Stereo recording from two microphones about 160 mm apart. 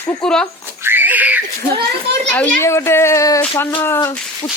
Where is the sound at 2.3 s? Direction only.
15° left (ahead or behind).